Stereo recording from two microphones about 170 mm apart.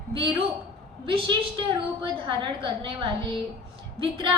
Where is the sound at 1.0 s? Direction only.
30° right (ahead or behind).